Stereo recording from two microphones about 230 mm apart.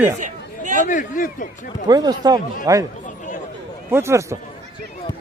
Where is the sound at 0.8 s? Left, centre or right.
Left.